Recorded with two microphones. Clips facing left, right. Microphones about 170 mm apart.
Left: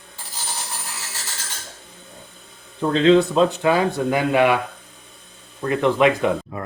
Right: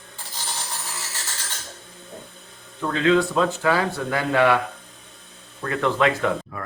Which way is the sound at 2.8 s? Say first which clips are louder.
Left 5 dB; 25° left (ahead or behind).